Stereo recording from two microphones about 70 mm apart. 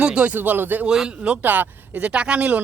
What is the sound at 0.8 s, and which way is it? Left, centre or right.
Speech, centre.